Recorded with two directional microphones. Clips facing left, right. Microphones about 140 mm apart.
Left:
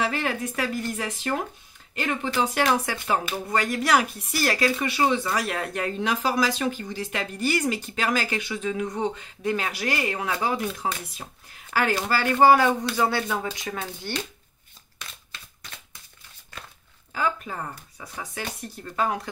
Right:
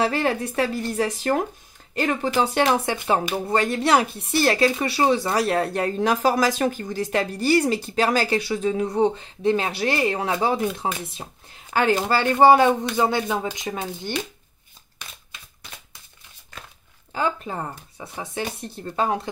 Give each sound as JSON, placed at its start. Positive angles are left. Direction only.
{"t": 0.0, "sound": "speech", "side_deg": -35}
{"t": 2.4, "sound": "speech", "side_deg": -25}
{"t": 17.1, "sound": "speech", "side_deg": -30}